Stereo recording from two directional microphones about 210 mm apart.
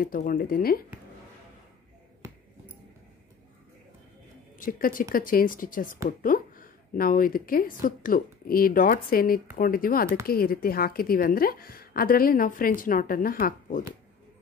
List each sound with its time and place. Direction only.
0.0 s a woman's voice: 45° left (ahead or behind)
4.6 s a woman's voice: 40° left (ahead or behind)